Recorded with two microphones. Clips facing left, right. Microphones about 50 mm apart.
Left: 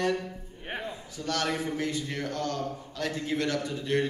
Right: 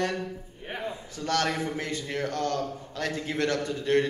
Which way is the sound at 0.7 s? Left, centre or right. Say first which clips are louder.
Even; left.